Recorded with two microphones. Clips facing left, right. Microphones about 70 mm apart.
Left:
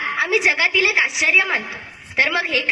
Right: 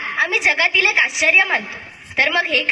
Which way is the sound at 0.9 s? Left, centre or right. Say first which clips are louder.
Right 1 dB; right.